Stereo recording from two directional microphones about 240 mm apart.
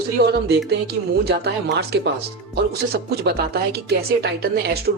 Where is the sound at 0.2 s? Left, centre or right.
Right.